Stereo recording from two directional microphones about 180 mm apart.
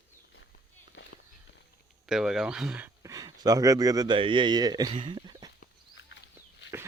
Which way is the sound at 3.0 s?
20° right (ahead or behind).